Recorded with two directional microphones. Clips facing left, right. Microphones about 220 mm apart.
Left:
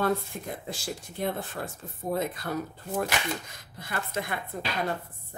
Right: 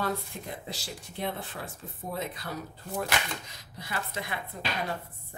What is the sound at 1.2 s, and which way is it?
Speech, 45° left (ahead or behind).